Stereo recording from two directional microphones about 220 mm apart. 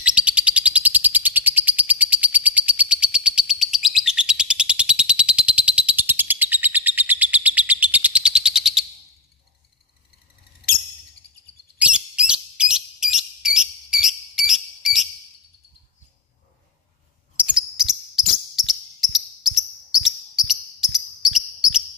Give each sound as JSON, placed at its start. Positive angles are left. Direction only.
{"t": 0.0, "sound": "bird", "side_deg": -5}
{"t": 11.8, "sound": "bird", "side_deg": -5}
{"t": 17.4, "sound": "cricket", "side_deg": -5}